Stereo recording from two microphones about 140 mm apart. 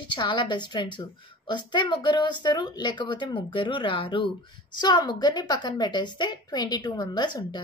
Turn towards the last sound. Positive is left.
turn(degrees=30)  # may be behind; listen again after turning